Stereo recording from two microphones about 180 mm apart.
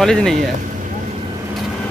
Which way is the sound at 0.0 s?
5° left (ahead or behind).